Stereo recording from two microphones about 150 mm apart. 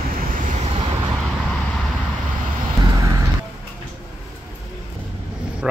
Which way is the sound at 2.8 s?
25° right (ahead or behind).